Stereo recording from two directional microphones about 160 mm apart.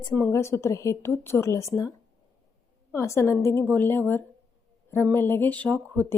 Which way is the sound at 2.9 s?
20° left (ahead or behind).